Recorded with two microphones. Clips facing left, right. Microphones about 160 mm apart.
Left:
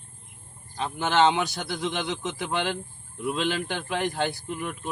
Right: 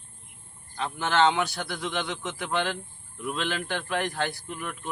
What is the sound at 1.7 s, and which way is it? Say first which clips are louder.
Speech: left 4 dB; 30° left (ahead or behind).